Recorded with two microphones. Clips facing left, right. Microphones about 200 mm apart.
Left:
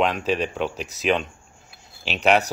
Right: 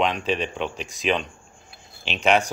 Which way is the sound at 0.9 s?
5° left (ahead or behind).